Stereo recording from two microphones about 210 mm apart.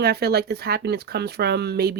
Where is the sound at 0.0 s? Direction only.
50° right (ahead or behind).